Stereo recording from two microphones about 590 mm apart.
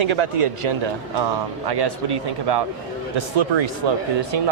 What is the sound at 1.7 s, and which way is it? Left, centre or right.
Speech, right.